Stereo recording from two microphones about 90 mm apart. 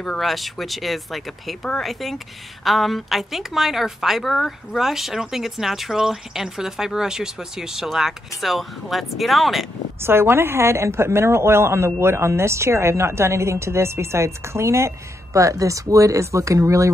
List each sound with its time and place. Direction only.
0.0 s a woman's voice: 5° left (ahead or behind)
10.0 s a woman's voice: 25° right (ahead or behind)